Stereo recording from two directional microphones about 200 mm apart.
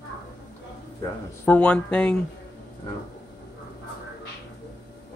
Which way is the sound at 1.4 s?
5° left (ahead or behind).